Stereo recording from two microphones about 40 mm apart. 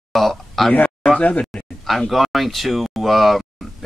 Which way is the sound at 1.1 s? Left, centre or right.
Left.